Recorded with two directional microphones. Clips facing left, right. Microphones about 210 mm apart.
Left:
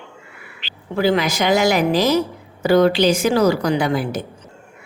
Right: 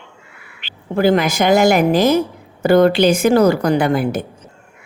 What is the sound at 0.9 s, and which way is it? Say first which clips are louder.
Speech: right 3 dB; 50° right (ahead or behind).